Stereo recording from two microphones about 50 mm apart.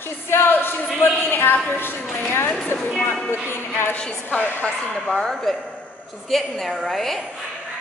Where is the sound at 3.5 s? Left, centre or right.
Left.